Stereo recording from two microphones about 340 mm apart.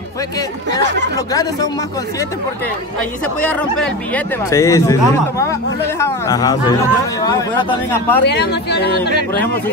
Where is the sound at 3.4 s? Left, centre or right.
Centre.